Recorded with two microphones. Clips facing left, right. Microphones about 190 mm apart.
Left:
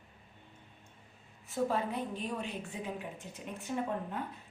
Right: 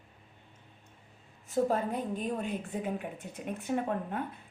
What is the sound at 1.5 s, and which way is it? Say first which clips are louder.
A woman's voice: right 4 dB; 45° right (ahead or behind).